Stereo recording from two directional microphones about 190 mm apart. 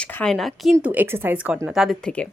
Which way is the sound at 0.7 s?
10° right (ahead or behind).